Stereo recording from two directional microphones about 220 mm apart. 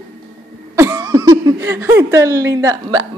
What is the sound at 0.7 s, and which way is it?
Speech, 15° right (ahead or behind).